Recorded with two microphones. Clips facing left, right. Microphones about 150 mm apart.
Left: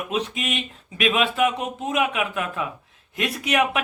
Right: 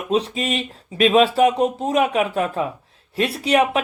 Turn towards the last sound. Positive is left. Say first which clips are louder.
# right 4 dB
turn(degrees=-30)  # may be behind; listen again after turning